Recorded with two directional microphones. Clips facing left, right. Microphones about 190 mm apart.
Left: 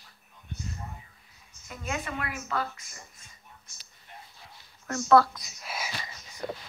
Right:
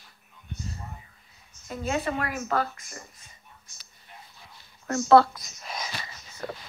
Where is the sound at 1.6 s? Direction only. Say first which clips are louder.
Right 7 dB; 30° right (ahead or behind).